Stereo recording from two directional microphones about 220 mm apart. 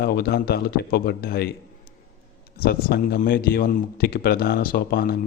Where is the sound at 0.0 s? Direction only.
45° left (ahead or behind).